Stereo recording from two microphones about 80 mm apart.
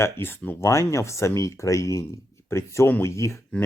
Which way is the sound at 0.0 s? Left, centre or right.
Left.